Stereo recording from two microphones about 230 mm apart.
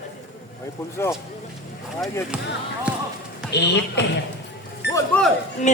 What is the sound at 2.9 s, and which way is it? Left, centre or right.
Basketball bounce, centre.